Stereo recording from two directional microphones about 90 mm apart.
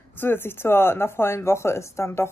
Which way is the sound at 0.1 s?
25° left (ahead or behind).